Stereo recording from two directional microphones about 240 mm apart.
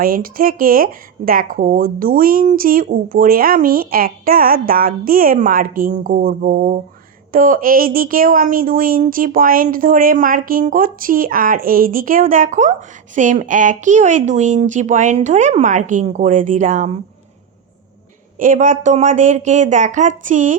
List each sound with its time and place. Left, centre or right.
0.0 s speech: right
18.3 s speech: right